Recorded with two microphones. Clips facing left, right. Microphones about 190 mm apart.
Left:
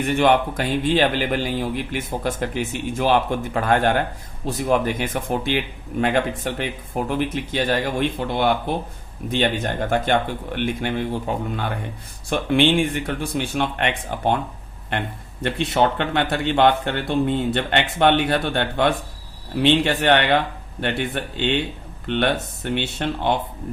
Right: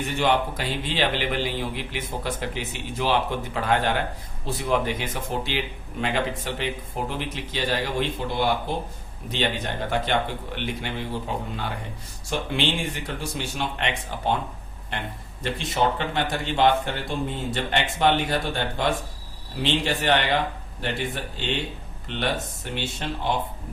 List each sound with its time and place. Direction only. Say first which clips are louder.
0.0 s a man's voice: left 5 dB; 55° left (ahead or behind)
15.4 s a man's voice: left 4 dB; 60° left (ahead or behind)